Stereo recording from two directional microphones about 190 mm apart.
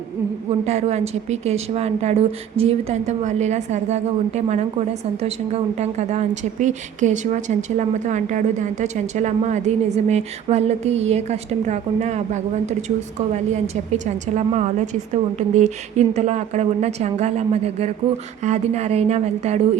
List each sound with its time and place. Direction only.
0.6 s a woman's voice: 35° right (ahead or behind)
13.9 s a woman's voice: 40° right (ahead or behind)